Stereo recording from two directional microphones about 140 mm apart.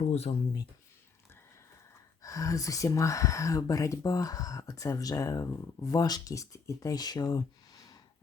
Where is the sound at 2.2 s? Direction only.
25° left (ahead or behind).